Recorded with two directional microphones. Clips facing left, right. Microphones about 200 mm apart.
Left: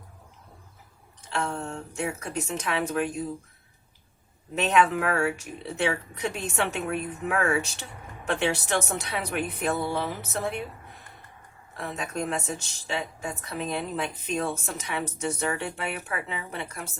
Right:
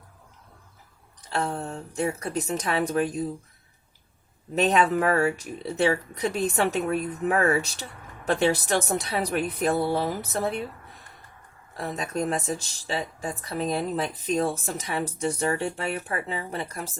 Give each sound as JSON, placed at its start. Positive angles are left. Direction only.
{"t": 1.2, "sound": "speech", "side_deg": -35}
{"t": 4.5, "sound": "speech", "side_deg": -35}
{"t": 11.8, "sound": "speech", "side_deg": -40}